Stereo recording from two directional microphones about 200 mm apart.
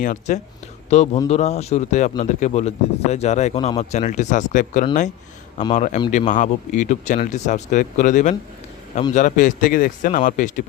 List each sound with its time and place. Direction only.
0.0 s a man's voice: 40° left (ahead or behind)